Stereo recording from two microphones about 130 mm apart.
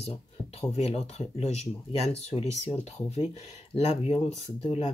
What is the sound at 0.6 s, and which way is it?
Speech, 55° left (ahead or behind).